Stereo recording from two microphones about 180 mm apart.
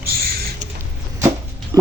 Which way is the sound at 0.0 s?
60° right (ahead or behind).